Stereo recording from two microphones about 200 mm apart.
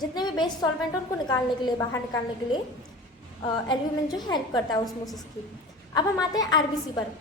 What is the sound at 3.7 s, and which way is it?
A woman's voice, 20° left (ahead or behind).